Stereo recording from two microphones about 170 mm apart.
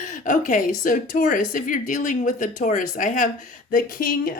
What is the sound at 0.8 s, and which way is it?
Speech, 50° left (ahead or behind).